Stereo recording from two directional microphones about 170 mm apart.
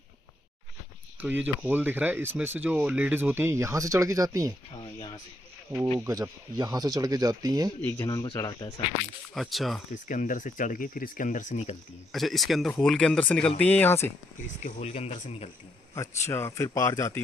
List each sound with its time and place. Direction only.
1.2 s speech: 10° right (ahead or behind)
5.9 s speech: 15° right (ahead or behind)
7.8 s speech: 15° left (ahead or behind)
9.3 s speech: centre (ahead or behind)
9.8 s speech: 50° left (ahead or behind)
12.1 s a man's voice: centre (ahead or behind)
14.6 s speech: 40° left (ahead or behind)
15.9 s a man's voice: 15° left (ahead or behind)